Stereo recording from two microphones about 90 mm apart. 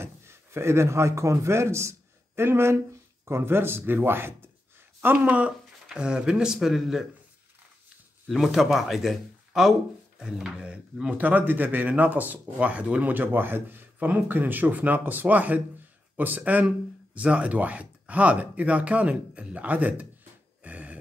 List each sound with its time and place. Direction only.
0.0 s speech: 30° right (ahead or behind); by 7.1 s 5° right (ahead or behind)
8.3 s speech: centre (ahead or behind)
20.6 s a sound: 15° right (ahead or behind)